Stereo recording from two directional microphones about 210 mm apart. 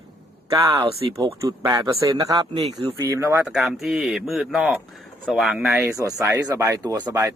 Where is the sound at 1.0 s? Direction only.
25° right (ahead or behind).